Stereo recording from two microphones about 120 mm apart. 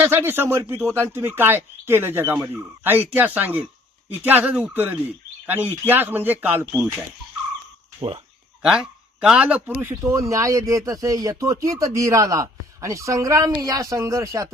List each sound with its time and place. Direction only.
0.0 s speech: 20° right (ahead or behind)
7.9 s speech: 55° right (ahead or behind)
9.2 s speech: 5° right (ahead or behind); by 14.5 s 25° right (ahead or behind)